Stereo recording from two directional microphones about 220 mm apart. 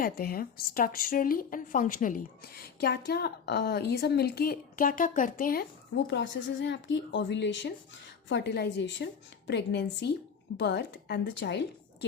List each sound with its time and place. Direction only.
0.0 s a woman's voice: 40° left (ahead or behind)
5.9 s speech: 55° left (ahead or behind)